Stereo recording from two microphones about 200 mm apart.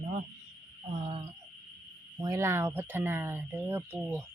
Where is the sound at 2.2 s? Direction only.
15° right (ahead or behind).